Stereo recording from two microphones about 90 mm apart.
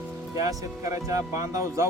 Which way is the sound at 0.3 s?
40° right (ahead or behind).